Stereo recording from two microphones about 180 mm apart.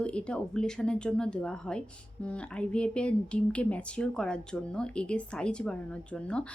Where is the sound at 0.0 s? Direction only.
5° left (ahead or behind).